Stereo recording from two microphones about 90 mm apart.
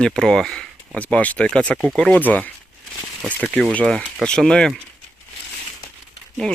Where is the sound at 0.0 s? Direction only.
5° left (ahead or behind).